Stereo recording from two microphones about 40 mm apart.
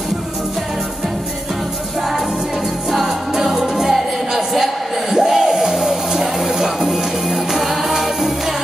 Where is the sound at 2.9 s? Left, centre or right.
Centre.